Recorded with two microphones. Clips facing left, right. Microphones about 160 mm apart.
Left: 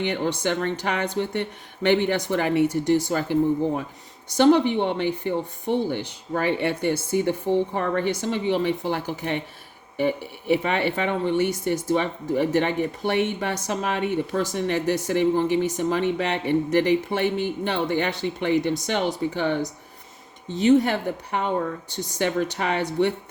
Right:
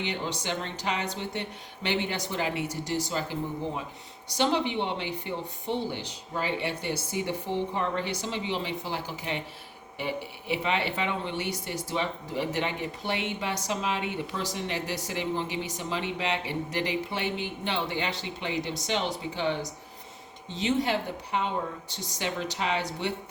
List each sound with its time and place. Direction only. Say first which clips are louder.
0.0 s speech: left 8 dB; 55° left (ahead or behind)
4.4 s speech: left 9 dB; 50° left (ahead or behind)
10.5 s speech: left 7 dB; 50° left (ahead or behind)